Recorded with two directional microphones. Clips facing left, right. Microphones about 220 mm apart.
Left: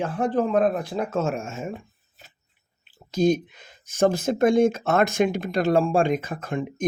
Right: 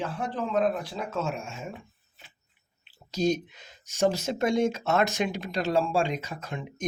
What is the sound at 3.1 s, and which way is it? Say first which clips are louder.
Speech: left 5 dB; 50° left (ahead or behind).